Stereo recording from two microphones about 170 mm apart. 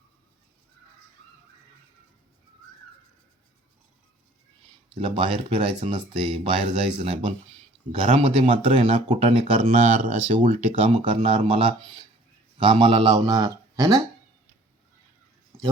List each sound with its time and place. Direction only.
4.9 s a man's voice: 30° right (ahead or behind)